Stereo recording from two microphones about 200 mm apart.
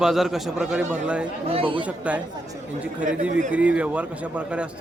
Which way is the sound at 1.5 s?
25° right (ahead or behind).